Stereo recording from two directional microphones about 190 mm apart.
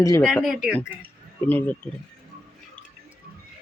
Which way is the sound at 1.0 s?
10° left (ahead or behind).